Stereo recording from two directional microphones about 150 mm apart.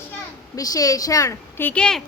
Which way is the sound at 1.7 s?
5° left (ahead or behind).